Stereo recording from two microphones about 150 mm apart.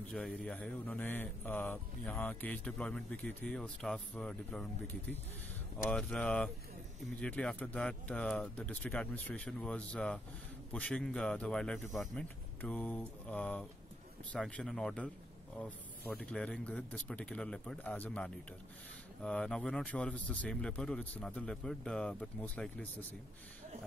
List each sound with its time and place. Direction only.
0.1 s speech: 5° left (ahead or behind)